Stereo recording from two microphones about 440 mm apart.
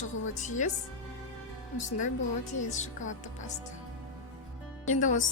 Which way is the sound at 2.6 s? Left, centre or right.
Centre.